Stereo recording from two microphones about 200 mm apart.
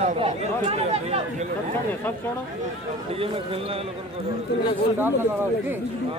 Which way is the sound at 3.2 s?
30° right (ahead or behind).